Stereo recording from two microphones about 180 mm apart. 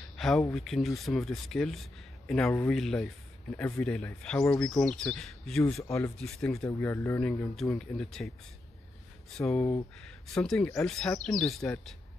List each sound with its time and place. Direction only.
0.5 s speech: centre (ahead or behind)
5.9 s speech: 15° left (ahead or behind)
6.1 s speech: 5° left (ahead or behind)
9.3 s speech: 5° left (ahead or behind)